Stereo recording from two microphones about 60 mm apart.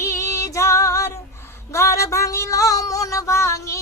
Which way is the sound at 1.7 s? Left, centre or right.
Left.